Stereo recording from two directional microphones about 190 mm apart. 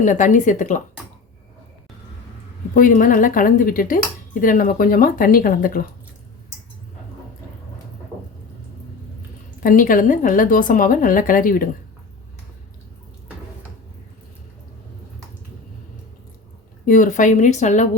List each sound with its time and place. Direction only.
0.0 s a woman's voice: 40° left (ahead or behind)
2.7 s speech: 45° left (ahead or behind)
9.6 s speech: 45° left (ahead or behind)
16.8 s a woman's voice: 45° left (ahead or behind)